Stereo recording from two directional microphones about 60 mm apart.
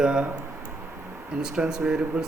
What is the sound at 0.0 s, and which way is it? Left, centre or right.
Speech, centre.